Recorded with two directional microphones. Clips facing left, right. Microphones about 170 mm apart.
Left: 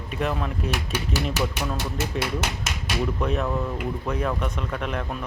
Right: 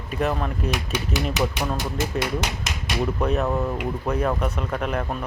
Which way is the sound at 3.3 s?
40° right (ahead or behind).